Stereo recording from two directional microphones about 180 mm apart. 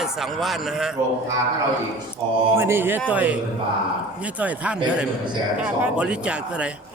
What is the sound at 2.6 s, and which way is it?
Speech, 10° right (ahead or behind).